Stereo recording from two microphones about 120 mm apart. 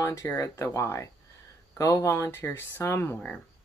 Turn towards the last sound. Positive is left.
turn(degrees=20)  # may be behind; listen again after turning